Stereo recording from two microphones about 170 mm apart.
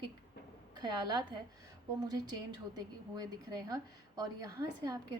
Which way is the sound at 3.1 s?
25° right (ahead or behind).